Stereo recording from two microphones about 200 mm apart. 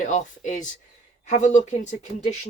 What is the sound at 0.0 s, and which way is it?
Speech, 40° left (ahead or behind).